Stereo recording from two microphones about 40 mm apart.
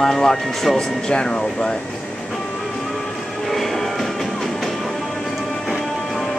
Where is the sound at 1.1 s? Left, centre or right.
Left.